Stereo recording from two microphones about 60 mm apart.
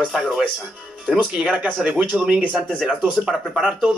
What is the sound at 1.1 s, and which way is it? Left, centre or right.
Speech, centre.